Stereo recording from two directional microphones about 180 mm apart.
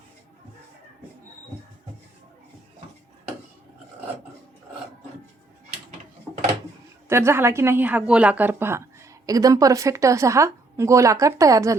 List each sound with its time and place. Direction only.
7.1 s speech: 15° right (ahead or behind)